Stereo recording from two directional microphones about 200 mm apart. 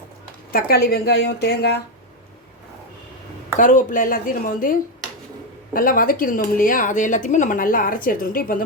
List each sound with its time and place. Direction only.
0.5 s speech: 50° left (ahead or behind)
3.6 s speech: 40° left (ahead or behind)